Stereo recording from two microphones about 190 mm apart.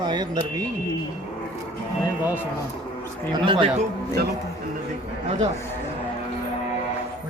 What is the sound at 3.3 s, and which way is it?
Speech, 25° right (ahead or behind).